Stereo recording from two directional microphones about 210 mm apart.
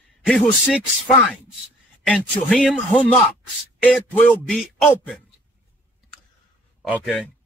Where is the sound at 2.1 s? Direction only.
Centre (ahead or behind).